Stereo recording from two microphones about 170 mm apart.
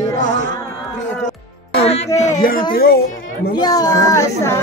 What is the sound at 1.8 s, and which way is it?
Music, 35° left (ahead or behind).